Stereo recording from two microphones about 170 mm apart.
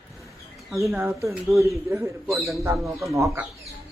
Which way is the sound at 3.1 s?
15° right (ahead or behind).